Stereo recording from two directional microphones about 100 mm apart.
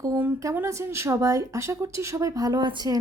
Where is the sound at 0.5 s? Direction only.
30° right (ahead or behind).